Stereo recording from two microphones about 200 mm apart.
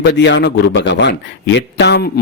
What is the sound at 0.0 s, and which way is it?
A man's voice, 60° left (ahead or behind).